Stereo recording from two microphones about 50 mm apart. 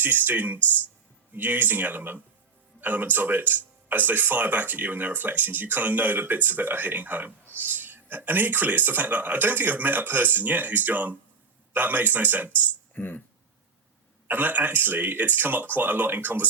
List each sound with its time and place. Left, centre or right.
0.0 s speech: right
12.9 s speech: left
14.3 s speech: right